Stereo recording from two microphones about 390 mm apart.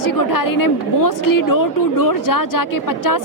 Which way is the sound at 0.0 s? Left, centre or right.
Left.